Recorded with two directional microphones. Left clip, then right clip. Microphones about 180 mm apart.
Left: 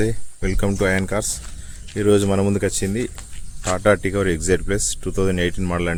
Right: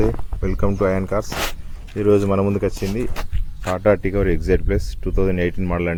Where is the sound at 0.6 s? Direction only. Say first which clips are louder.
Right 1 dB; 30° left (ahead or behind).